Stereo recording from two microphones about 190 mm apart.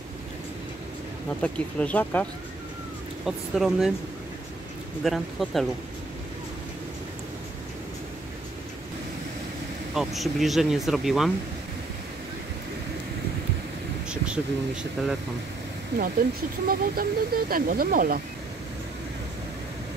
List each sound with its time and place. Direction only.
1.4 s speech: 5° left (ahead or behind)
3.3 s speech: centre (ahead or behind)
5.0 s speech: centre (ahead or behind)
9.9 s speech: centre (ahead or behind)
14.0 s speech: 5° right (ahead or behind)
16.6 s speech: 50° right (ahead or behind)